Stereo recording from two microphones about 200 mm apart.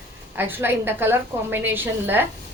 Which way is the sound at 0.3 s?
10° right (ahead or behind).